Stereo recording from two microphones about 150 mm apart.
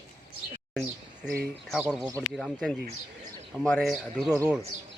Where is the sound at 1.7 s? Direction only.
5° right (ahead or behind).